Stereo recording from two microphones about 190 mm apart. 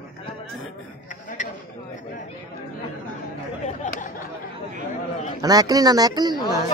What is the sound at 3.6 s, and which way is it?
Chatter, 40° left (ahead or behind).